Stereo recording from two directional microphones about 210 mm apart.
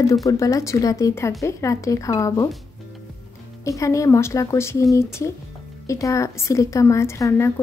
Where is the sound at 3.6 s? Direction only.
15° left (ahead or behind).